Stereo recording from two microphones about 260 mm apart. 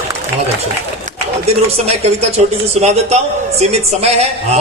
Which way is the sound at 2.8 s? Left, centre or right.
Right.